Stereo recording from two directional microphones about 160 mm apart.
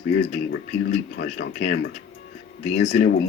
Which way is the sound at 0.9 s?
70° left (ahead or behind).